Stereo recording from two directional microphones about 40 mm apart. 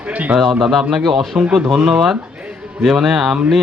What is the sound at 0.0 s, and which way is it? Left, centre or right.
Speech, right.